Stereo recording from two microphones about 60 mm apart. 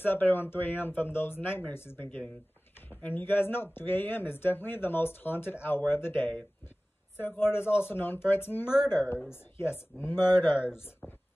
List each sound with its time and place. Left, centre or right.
0.0 s speech: left